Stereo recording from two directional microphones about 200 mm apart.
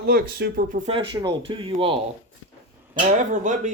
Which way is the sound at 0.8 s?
25° right (ahead or behind).